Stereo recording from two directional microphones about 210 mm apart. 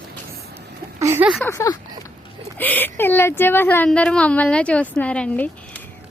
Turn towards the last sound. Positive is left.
turn(degrees=5)  # may be behind; listen again after turning